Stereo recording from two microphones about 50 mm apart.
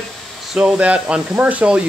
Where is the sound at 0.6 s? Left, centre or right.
Right.